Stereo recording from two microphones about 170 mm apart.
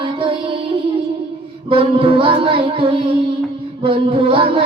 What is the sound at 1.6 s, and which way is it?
Child singing, 30° right (ahead or behind).